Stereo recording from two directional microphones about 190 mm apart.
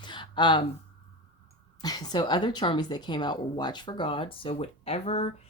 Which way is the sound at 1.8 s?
20° left (ahead or behind).